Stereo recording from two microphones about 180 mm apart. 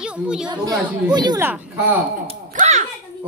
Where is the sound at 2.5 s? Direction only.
40° right (ahead or behind).